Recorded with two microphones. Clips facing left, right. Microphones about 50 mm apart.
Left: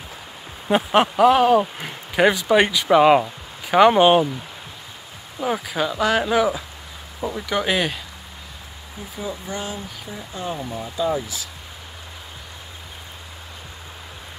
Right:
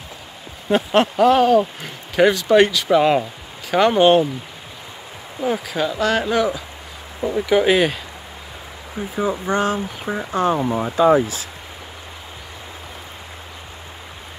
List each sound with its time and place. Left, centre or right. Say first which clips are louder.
0.7 s speech: right 1 dB; centre
5.4 s speech: right 2 dB; centre
7.3 s speech: right 7 dB; centre
9.1 s speech: right 9 dB; right
9.6 s speech: right 10 dB; right
10.6 s speech: right 8 dB; right